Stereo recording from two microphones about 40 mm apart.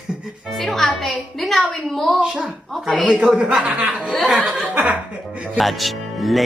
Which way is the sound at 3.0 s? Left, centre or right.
Right.